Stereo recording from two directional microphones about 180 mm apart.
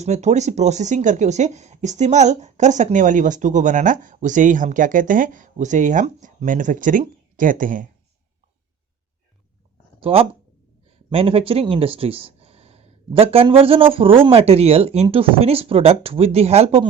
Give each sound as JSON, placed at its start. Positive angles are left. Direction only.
{"t": 0.0, "sound": "speech", "side_deg": -40}
{"t": 10.0, "sound": "speech", "side_deg": -30}